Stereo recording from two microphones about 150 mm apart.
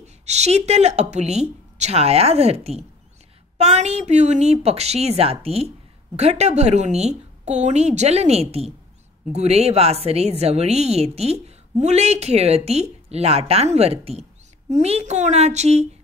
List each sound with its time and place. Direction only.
0.0 s a woman's voice: 45° right (ahead or behind)